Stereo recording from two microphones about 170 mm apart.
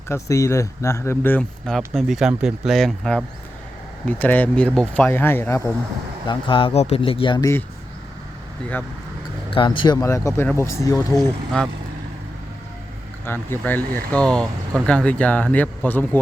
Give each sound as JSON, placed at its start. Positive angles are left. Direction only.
{"t": 0.1, "sound": "speech", "side_deg": 15}
{"t": 6.2, "sound": "speech", "side_deg": 30}
{"t": 9.5, "sound": "speech", "side_deg": 30}
{"t": 11.2, "sound": "speech", "side_deg": 0}
{"t": 13.2, "sound": "speech", "side_deg": 15}